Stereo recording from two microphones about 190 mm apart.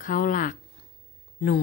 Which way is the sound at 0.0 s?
45° left (ahead or behind).